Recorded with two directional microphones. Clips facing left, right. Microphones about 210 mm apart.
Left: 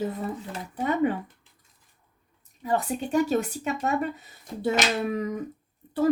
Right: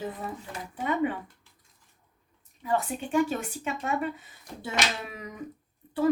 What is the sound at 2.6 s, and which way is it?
Speech, 40° left (ahead or behind).